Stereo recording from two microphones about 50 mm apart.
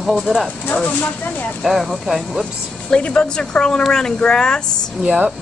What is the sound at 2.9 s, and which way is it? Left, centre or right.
A woman's voice, left.